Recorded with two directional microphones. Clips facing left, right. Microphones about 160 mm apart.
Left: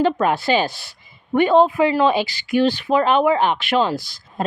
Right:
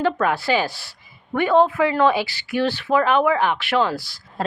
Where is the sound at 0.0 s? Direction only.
20° left (ahead or behind).